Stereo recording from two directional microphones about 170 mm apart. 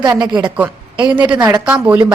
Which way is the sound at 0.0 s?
25° right (ahead or behind).